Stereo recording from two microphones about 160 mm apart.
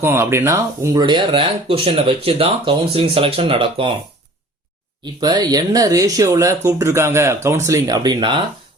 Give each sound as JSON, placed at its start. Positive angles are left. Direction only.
{"t": 0.0, "sound": "speech", "side_deg": -15}
{"t": 1.0, "sound": "speech", "side_deg": -30}
{"t": 5.2, "sound": "speech", "side_deg": -25}